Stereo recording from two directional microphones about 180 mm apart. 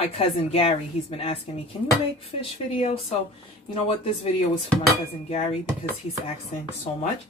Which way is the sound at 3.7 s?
35° left (ahead or behind).